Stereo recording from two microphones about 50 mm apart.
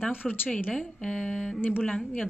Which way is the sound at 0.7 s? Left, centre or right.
Left.